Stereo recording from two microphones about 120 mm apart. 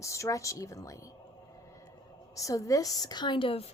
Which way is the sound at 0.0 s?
25° left (ahead or behind).